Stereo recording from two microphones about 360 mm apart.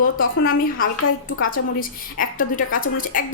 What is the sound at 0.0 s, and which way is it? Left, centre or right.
Speech, left.